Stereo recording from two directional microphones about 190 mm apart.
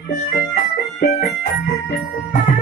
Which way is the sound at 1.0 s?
45° left (ahead or behind).